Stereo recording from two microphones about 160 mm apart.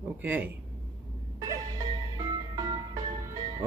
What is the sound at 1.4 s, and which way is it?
Music, 20° right (ahead or behind).